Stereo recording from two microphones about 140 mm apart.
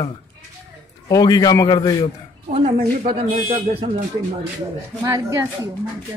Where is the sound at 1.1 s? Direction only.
25° left (ahead or behind).